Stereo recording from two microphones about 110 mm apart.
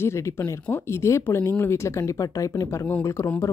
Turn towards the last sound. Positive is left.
turn(degrees=25)  # may be behind; listen again after turning